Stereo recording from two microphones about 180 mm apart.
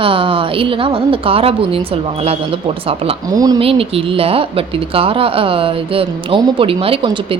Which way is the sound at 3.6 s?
30° right (ahead or behind).